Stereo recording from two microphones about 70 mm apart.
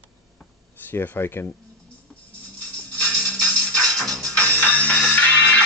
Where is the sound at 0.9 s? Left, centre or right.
Left.